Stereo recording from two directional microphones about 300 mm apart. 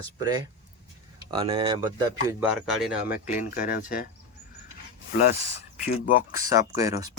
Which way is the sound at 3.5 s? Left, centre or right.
Left.